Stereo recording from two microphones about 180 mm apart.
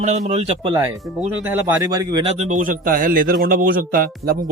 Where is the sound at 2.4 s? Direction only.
45° right (ahead or behind).